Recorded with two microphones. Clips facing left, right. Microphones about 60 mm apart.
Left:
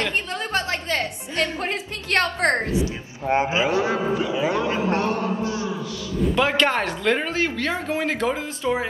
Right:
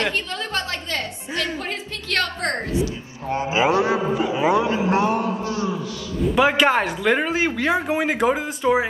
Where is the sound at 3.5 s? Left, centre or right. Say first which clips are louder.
Right 3 dB; right.